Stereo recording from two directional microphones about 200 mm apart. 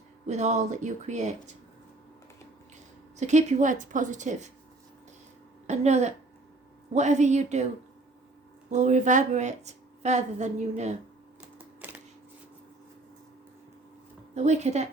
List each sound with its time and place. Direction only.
0.3 s a woman's voice: 35° right (ahead or behind)
3.2 s a woman's voice: 35° right (ahead or behind)
5.6 s a woman's voice: 35° right (ahead or behind)
8.7 s a woman's voice: 35° right (ahead or behind)
11.5 s typing: 10° right (ahead or behind)
14.3 s a woman's voice: 35° right (ahead or behind)